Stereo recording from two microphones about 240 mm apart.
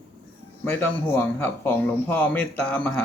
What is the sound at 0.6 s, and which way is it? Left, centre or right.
Speech, centre.